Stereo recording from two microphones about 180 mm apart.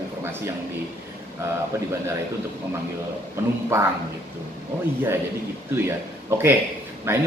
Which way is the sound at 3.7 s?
15° right (ahead or behind).